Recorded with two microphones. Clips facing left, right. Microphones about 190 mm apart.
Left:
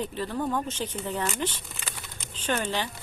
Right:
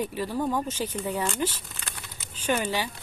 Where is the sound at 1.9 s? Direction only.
Centre (ahead or behind).